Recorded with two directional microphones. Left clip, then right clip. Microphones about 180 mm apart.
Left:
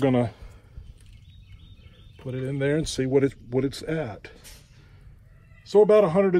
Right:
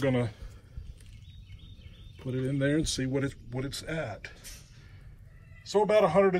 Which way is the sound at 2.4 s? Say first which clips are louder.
Left 3 dB; 40° left (ahead or behind).